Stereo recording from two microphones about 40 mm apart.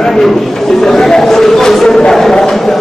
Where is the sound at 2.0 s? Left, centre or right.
Centre.